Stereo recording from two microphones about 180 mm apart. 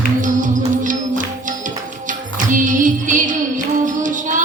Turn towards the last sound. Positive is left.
turn(degrees=-45)  # may be behind; listen again after turning